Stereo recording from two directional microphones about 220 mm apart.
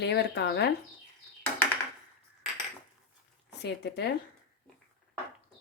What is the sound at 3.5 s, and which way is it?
Speech, 50° left (ahead or behind).